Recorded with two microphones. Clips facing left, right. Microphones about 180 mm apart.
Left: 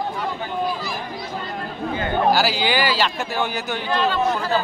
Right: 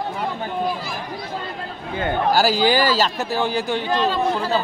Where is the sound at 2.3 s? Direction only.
45° right (ahead or behind).